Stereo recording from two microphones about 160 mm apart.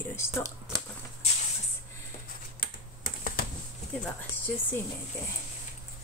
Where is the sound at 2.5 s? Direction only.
65° left (ahead or behind).